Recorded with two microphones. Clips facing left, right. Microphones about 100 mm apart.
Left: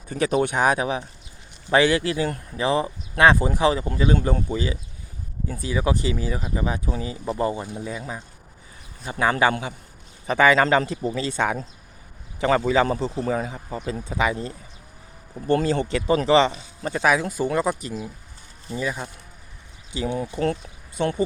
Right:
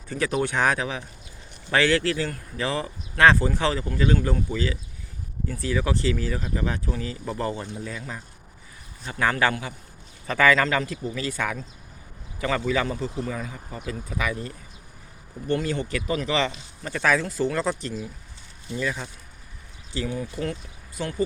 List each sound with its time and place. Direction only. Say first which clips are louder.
0.2 s speech: left 3 dB; 20° left (ahead or behind)